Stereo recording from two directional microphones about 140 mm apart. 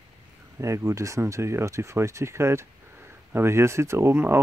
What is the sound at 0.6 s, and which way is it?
Speech, 20° right (ahead or behind).